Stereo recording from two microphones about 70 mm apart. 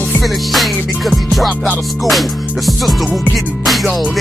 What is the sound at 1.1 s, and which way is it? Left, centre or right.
Music, centre.